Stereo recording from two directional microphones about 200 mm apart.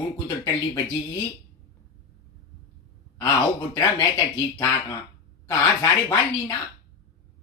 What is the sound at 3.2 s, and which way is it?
Speech, 15° left (ahead or behind).